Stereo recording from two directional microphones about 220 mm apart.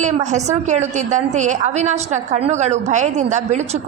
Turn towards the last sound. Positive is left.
turn(degrees=-30)  # may be behind; listen again after turning